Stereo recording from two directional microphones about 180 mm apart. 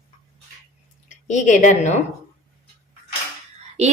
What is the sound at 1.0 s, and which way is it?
Speech, 45° left (ahead or behind).